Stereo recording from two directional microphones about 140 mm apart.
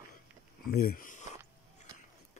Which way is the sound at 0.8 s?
80° left.